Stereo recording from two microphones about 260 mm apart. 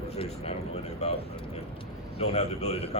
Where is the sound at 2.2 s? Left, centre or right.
Left.